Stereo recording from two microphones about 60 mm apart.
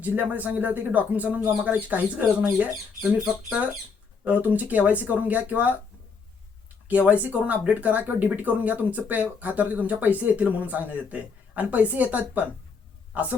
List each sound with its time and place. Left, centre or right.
0.0 s speech: right
4.2 s speech: right
7.1 s speech: right